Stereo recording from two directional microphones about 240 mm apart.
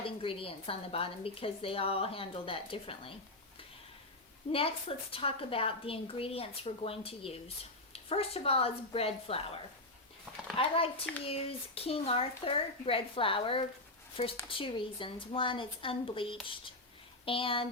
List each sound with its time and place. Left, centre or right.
0.0 s a woman's voice: left
4.5 s a woman's voice: left
10.6 s a woman's voice: left